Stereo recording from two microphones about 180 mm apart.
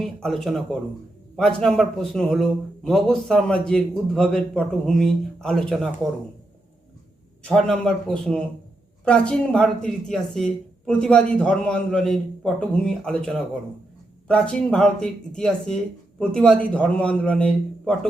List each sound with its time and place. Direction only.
0.0 s a man's voice: centre (ahead or behind)
7.4 s a man's voice: 5° left (ahead or behind)